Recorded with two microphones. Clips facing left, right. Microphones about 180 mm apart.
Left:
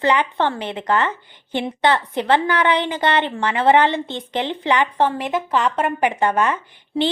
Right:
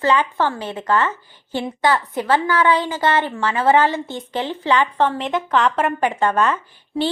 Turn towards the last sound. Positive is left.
turn(degrees=15)  # may be behind; listen again after turning